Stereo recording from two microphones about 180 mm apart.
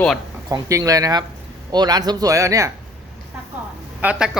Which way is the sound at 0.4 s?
20° right (ahead or behind).